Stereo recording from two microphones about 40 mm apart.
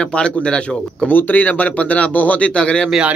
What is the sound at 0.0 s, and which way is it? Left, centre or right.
Speech, left.